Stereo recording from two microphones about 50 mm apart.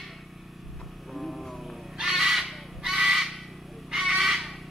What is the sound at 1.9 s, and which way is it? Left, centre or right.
Crow, centre.